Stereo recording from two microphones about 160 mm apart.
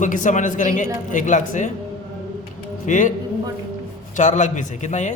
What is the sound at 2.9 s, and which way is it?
Speech, 55° left (ahead or behind).